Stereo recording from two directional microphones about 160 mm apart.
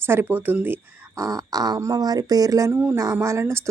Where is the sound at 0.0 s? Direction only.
15° right (ahead or behind).